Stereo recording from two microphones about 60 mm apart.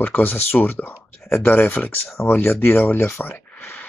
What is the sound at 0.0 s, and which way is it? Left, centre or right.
Speech, left.